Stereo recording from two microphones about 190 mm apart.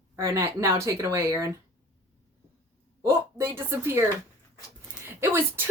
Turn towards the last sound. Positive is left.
turn(degrees=-10)  # may be behind; listen again after turning